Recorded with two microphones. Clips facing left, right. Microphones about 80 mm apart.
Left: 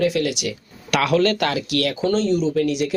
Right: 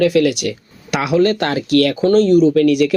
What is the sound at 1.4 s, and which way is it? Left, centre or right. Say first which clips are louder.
Speech: right 7 dB; right.